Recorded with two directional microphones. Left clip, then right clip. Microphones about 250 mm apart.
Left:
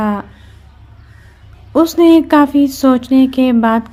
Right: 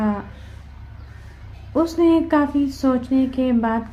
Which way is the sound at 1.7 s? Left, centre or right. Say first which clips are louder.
Left 8 dB; left.